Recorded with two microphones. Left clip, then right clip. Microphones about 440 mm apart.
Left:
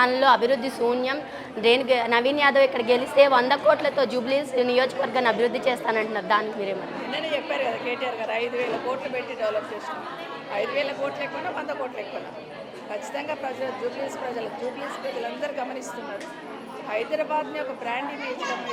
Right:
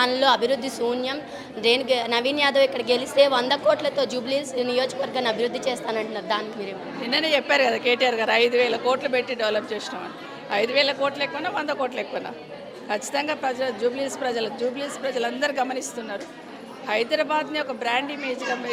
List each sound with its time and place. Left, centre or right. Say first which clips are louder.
0.0 s a woman's voice: left 1 dB; centre
7.1 s a woman's voice: right 7 dB; right
15.4 s a woman's voice: right 6 dB; right
16.9 s a woman's voice: right 3 dB; right